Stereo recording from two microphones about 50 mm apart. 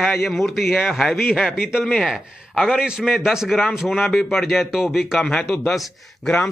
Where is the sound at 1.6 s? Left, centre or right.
Centre.